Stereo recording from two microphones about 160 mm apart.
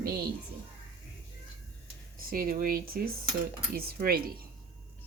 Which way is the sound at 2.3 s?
65° right (ahead or behind).